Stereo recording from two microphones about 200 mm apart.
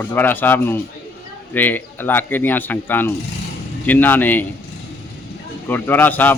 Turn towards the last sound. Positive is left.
turn(degrees=10)  # may be behind; listen again after turning